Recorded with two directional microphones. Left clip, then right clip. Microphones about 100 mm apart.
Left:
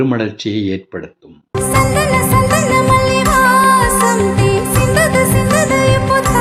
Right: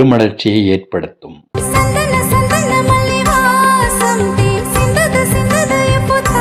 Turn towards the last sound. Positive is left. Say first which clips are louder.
# even
turn(degrees=0)  # may be behind; listen again after turning